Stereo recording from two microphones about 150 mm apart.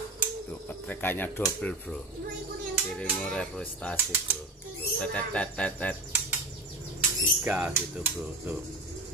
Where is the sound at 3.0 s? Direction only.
5° left (ahead or behind).